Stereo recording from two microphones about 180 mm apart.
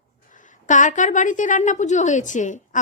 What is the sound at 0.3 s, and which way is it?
A woman's voice, 45° left (ahead or behind).